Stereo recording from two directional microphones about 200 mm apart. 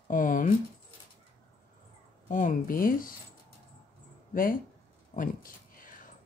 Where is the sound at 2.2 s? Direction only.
40° left (ahead or behind).